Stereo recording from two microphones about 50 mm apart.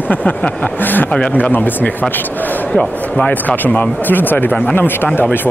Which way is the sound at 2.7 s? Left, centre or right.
Left.